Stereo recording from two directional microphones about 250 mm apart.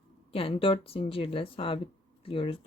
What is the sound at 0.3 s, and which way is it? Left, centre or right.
Speech, left.